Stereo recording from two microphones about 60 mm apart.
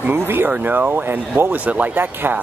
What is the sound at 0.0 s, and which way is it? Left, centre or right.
Speech, right.